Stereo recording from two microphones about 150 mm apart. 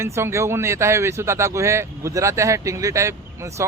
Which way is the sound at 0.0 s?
15° right (ahead or behind).